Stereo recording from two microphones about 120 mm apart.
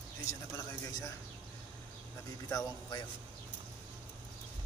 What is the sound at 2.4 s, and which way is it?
Speech, 30° left (ahead or behind).